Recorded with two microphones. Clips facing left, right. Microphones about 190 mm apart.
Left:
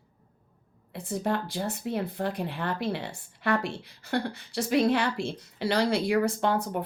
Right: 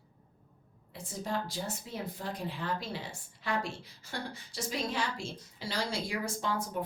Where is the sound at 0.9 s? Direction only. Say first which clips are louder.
Left 7 dB; 60° left (ahead or behind).